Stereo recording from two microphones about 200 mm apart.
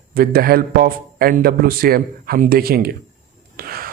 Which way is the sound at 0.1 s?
45° right (ahead or behind).